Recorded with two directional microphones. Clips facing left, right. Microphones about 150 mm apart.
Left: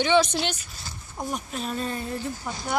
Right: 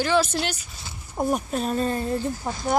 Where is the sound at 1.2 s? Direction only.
45° right (ahead or behind).